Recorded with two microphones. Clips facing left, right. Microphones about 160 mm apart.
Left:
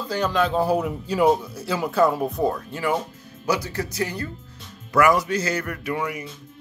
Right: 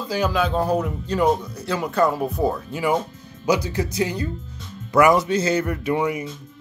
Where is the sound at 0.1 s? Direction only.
5° right (ahead or behind).